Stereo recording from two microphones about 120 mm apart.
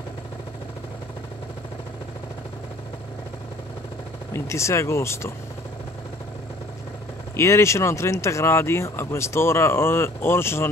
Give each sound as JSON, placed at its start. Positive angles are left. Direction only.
{"t": 4.3, "sound": "speech", "side_deg": 25}
{"t": 7.3, "sound": "speech", "side_deg": 25}